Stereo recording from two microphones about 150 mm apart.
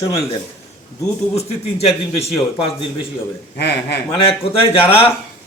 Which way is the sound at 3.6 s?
90° left.